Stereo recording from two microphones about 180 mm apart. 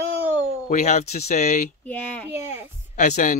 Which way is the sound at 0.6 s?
40° left (ahead or behind).